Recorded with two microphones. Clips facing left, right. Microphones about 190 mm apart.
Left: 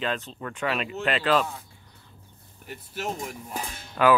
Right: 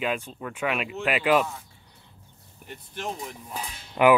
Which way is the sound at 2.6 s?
5° left (ahead or behind).